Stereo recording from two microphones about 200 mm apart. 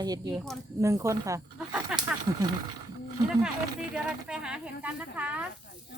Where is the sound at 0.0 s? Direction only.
20° right (ahead or behind).